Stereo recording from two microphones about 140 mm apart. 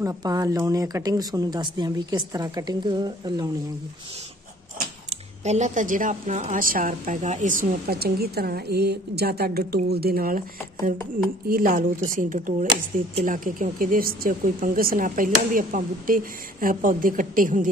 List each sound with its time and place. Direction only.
0.0 s speech: 25° right (ahead or behind)
5.1 s a woman's voice: 55° right (ahead or behind); by 10.4 s 90° right
11.4 s a woman's voice: 85° right